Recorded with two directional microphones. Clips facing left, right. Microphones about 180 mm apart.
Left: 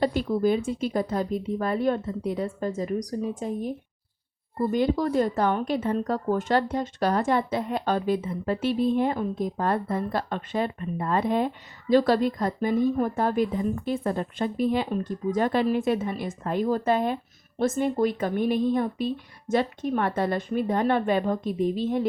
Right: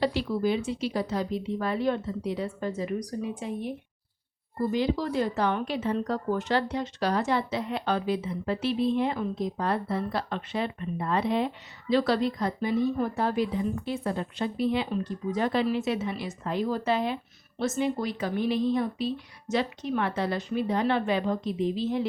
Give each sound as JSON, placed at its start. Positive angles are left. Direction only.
{"t": 0.0, "sound": "speech", "side_deg": 50}